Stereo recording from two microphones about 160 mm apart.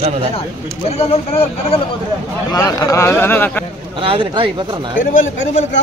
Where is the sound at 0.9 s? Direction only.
40° left (ahead or behind).